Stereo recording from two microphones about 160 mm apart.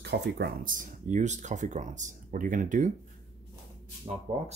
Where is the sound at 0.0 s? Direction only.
90° right.